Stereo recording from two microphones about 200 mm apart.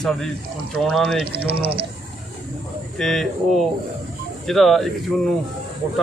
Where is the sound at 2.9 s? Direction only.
Centre (ahead or behind).